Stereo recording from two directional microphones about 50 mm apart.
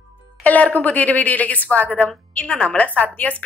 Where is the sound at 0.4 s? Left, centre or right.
Left.